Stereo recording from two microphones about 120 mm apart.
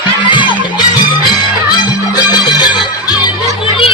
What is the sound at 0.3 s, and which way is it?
Music, 40° left (ahead or behind).